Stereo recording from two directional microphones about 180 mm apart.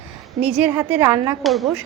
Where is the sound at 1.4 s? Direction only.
Centre (ahead or behind).